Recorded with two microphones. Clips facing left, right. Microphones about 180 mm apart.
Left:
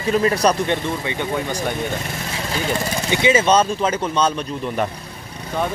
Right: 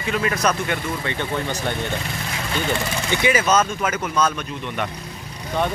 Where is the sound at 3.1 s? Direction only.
20° left (ahead or behind).